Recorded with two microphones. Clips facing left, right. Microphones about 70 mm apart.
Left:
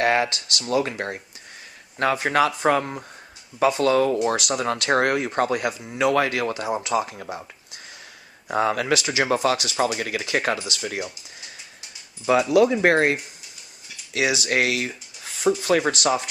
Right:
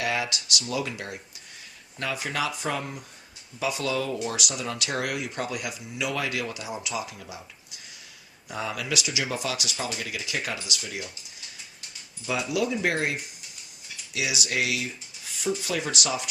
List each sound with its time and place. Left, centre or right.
0.0 s speech: left
8.4 s speech: left
12.2 s speech: left